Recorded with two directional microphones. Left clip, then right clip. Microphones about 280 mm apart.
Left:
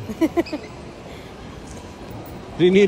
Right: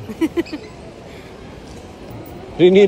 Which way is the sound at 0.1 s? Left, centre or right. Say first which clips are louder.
Even; centre.